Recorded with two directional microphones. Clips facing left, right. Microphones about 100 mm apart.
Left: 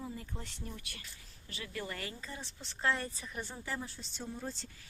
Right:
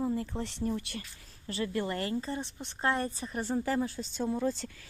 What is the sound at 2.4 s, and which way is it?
Speech, 20° right (ahead or behind).